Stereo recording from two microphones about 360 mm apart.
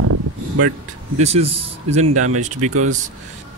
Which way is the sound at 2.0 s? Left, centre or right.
Right.